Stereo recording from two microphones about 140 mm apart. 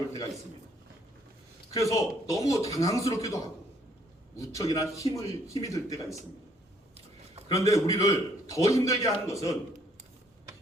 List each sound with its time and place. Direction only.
1.7 s a man's voice: 25° left (ahead or behind)
4.4 s a man's voice: 25° left (ahead or behind)
7.5 s a man's voice: 25° left (ahead or behind)